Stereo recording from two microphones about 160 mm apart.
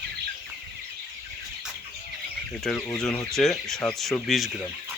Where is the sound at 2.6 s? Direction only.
5° left (ahead or behind).